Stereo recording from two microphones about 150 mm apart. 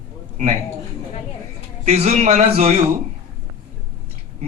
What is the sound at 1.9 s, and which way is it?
Speech, 45° right (ahead or behind).